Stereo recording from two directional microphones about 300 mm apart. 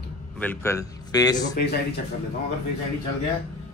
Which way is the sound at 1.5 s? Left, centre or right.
Left.